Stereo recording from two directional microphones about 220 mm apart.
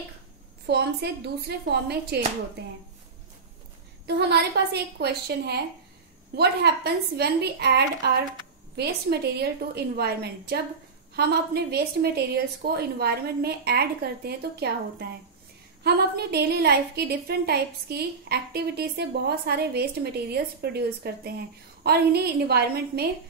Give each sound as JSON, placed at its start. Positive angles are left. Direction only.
{"t": 0.7, "sound": "a woman's voice", "side_deg": -50}
{"t": 4.2, "sound": "a woman's voice", "side_deg": -50}